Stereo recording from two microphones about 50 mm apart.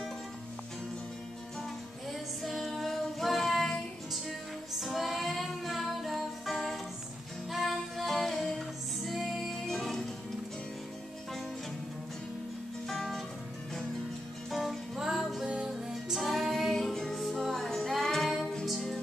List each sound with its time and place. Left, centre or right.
2.4 s female singing: centre
7.5 s music: centre
12.8 s music: centre
14.5 s music: centre
15.4 s music: right
15.9 s music: centre